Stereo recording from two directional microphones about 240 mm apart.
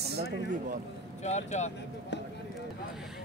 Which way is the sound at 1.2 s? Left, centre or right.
Left.